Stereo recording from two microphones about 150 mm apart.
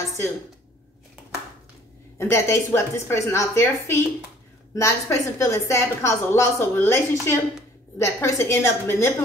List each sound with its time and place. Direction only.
2.1 s a woman's voice: 20° left (ahead or behind)